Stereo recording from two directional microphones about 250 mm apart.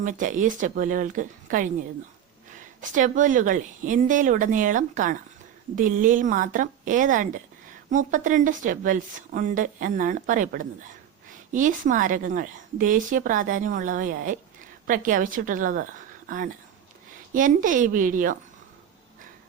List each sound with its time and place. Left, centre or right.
0.0 s a woman's voice: right
2.9 s a woman's voice: right
17.3 s a woman's voice: right